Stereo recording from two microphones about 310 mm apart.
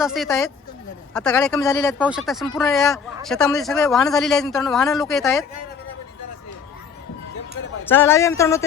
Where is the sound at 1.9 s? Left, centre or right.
Centre.